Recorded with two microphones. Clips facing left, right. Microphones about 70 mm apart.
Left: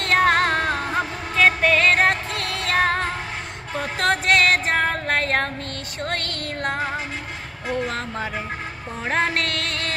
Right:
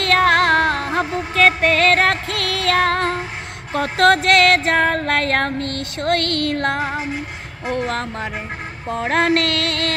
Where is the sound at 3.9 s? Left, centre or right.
Right.